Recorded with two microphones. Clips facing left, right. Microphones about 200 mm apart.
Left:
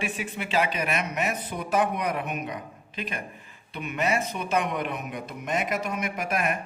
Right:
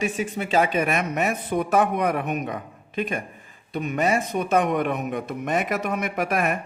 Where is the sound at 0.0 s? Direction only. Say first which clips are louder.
Right 6 dB; 45° right (ahead or behind).